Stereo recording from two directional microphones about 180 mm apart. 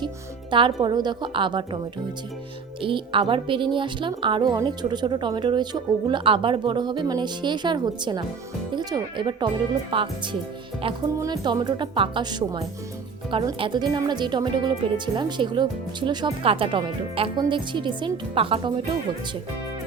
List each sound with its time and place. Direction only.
0.5 s speech: 25° right (ahead or behind)
2.8 s speech: 30° right (ahead or behind)
11.2 s speech: 20° right (ahead or behind)